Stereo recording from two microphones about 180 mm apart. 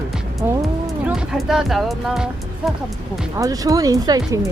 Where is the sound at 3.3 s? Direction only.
20° right (ahead or behind).